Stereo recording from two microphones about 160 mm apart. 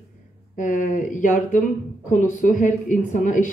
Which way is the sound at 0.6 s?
55° left (ahead or behind).